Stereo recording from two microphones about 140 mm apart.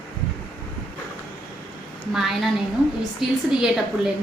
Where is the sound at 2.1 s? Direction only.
Centre (ahead or behind).